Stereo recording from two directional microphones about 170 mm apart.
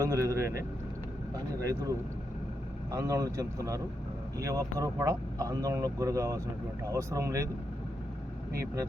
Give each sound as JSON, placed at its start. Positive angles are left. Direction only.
{"t": 0.0, "sound": "speech", "side_deg": -20}
{"t": 2.9, "sound": "speech", "side_deg": -20}
{"t": 8.5, "sound": "speech", "side_deg": -20}